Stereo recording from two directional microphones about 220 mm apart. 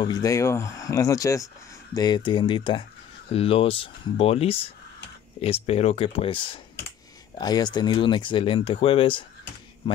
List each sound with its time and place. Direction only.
0.0 s speech: 15° left (ahead or behind)